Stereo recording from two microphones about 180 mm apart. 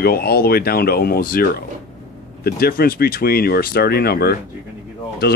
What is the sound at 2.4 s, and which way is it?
Speech, 60° left (ahead or behind).